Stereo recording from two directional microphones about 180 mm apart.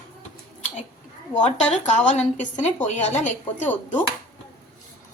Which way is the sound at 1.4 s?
40° left (ahead or behind).